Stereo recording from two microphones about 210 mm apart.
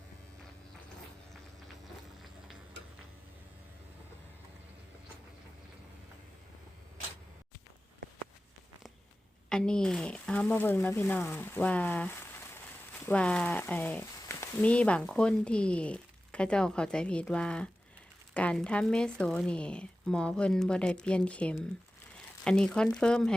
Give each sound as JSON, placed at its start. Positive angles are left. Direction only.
{"t": 9.5, "sound": "speech", "side_deg": 5}